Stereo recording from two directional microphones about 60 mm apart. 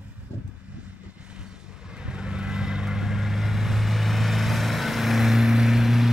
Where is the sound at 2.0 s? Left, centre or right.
Centre.